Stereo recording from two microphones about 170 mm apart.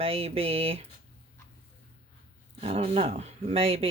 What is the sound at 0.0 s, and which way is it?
Speech, 35° right (ahead or behind).